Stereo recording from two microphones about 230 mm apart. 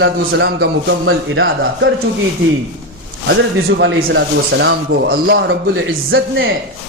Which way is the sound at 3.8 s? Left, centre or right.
Right.